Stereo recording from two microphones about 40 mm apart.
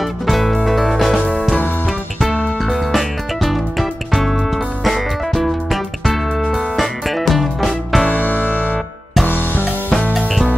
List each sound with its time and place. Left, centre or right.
0.3 s music: centre
2.6 s music: centre
8.1 s music: left
10.1 s music: centre